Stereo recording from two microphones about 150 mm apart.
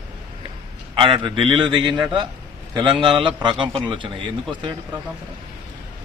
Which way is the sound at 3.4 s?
35° right (ahead or behind).